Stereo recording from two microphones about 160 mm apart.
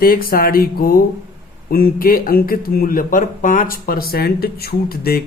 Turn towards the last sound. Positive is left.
turn(degrees=70)  # may be behind; listen again after turning